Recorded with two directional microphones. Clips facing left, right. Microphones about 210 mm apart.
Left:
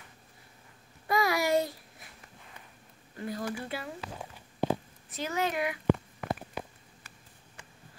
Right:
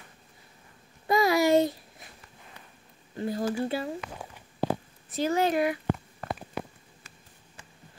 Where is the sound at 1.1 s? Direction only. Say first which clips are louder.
Right 5 dB; 25° right (ahead or behind).